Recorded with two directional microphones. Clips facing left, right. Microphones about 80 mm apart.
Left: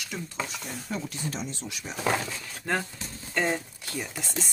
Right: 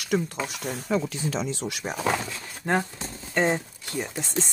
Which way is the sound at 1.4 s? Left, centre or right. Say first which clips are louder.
Right 7 dB; right.